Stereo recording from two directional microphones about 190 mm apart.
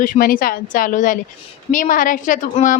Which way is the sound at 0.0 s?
50° left (ahead or behind).